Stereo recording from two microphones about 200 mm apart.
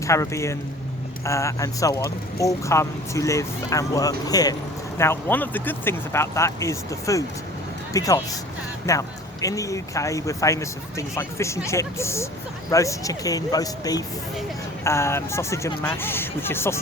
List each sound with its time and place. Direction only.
0.0 s speech: 15° left (ahead or behind)